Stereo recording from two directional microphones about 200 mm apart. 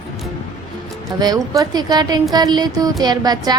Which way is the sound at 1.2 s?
20° right (ahead or behind).